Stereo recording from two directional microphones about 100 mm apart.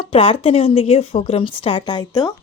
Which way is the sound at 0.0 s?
70° left (ahead or behind).